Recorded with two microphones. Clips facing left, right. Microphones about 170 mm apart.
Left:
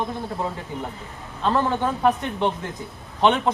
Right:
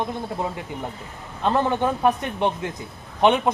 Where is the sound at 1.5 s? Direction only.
15° right (ahead or behind).